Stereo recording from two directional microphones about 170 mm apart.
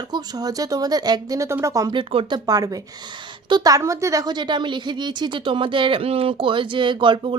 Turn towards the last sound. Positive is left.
turn(degrees=-30)  # may be behind; listen again after turning